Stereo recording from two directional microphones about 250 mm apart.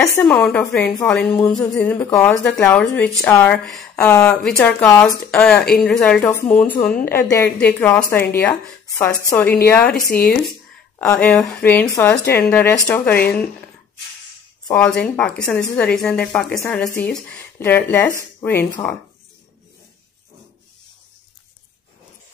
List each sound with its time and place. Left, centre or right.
0.0 s speech: centre
11.0 s speech: centre
14.7 s speech: centre